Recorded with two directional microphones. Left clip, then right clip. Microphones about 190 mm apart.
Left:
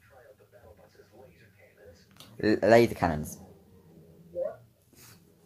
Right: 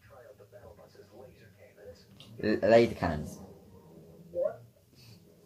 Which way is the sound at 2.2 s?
50° left (ahead or behind).